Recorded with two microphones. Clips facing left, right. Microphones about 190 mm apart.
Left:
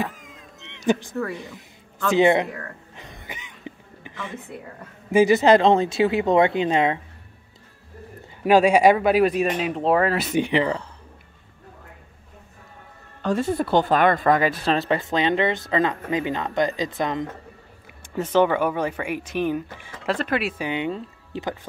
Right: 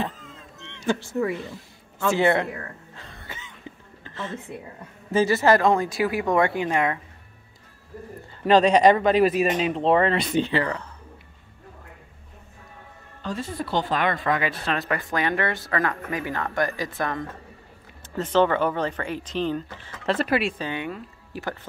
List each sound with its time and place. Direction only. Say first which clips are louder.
0.0 s cat: left 1 dB; 10° left (ahead or behind)
1.3 s speech: right 2 dB; 15° left (ahead or behind)
2.1 s a sound: left 5 dB; 20° left (ahead or behind)
5.1 s speech: left 4 dB; 15° left (ahead or behind)
8.4 s speech: left 1 dB; 10° left (ahead or behind)
13.2 s speech: left 8 dB; 65° left (ahead or behind); by 14.5 s 45° left (ahead or behind)
14.7 s speech: left 3 dB; 30° left (ahead or behind); by 19.9 s 10° left (ahead or behind)
20.1 s speech: right 1 dB; 5° right (ahead or behind)
20.5 s speech: left 4 dB; 15° left (ahead or behind)